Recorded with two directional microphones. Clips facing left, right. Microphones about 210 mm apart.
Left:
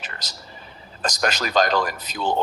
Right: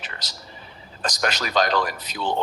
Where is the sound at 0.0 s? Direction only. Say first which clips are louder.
Left 1 dB; 45° left (ahead or behind).